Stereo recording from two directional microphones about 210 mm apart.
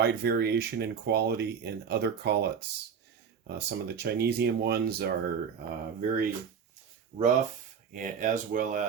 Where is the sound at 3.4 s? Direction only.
50° right (ahead or behind).